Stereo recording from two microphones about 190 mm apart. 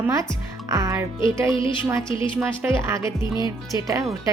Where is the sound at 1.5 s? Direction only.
25° left (ahead or behind).